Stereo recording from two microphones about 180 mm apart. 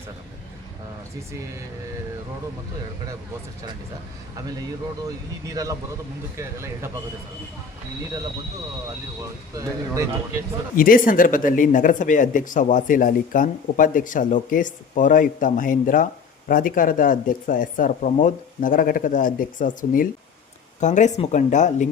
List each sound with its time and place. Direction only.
5.0 s speech: 20° right (ahead or behind)
9.6 s speech: 15° right (ahead or behind)
10.8 s speech: 50° left (ahead or behind)